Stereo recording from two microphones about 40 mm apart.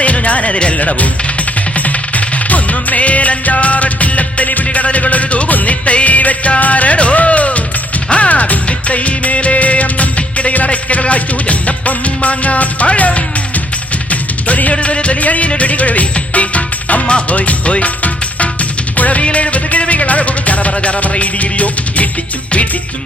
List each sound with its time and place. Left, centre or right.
0.0 s music: left